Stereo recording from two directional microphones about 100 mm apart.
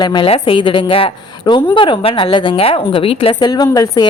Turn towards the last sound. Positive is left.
turn(degrees=40)  # may be behind; listen again after turning